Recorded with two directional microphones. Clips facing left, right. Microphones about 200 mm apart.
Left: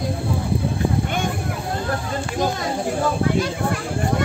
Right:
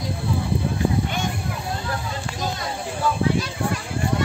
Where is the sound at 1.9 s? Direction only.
50° left (ahead or behind).